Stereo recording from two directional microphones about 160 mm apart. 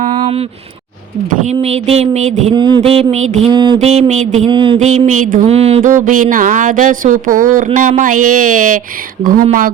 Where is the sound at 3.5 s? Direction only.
30° right (ahead or behind).